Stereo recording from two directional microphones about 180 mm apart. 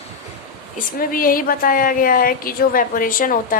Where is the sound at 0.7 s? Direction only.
50° left (ahead or behind).